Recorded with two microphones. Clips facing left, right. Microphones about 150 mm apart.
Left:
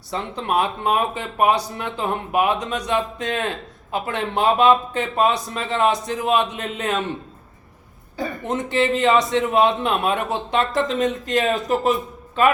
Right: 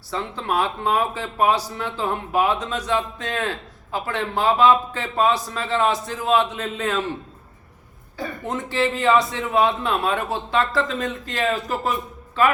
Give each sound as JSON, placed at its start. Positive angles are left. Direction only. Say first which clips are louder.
{"t": 0.1, "sound": "a man's voice", "louder": "left 2 dB", "side_deg": 20}
{"t": 8.1, "sound": "a man's voice", "louder": "left 3 dB", "side_deg": 20}